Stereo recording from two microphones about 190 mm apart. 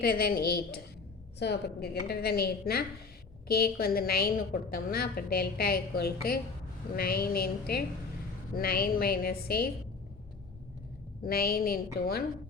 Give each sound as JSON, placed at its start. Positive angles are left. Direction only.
{"t": 0.0, "sound": "a woman's voice", "side_deg": 55}
{"t": 11.2, "sound": "a woman's voice", "side_deg": 55}